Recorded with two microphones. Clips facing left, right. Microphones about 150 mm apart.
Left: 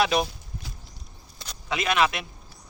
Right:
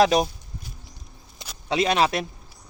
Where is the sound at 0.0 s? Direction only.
40° right (ahead or behind).